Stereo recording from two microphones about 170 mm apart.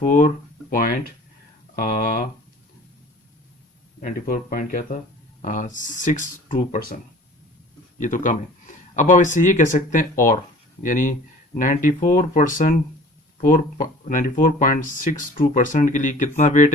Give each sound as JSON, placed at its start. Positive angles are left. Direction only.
{"t": 0.0, "sound": "speech", "side_deg": 50}
{"t": 4.0, "sound": "speech", "side_deg": 55}